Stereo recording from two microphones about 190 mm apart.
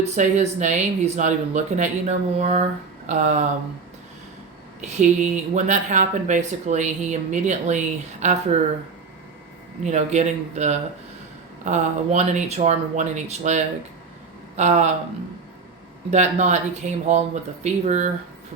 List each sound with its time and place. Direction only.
0.0 s speech: 35° right (ahead or behind)
4.8 s speech: 40° right (ahead or behind)
9.8 s speech: 35° right (ahead or behind)
16.0 s speech: 35° right (ahead or behind)